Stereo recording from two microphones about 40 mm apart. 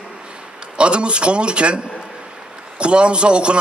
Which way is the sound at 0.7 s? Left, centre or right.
Right.